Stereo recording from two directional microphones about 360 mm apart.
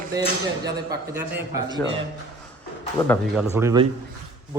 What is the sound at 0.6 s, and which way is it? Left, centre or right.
A man's voice, centre.